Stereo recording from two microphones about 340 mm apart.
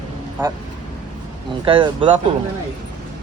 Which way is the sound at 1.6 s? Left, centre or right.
Centre.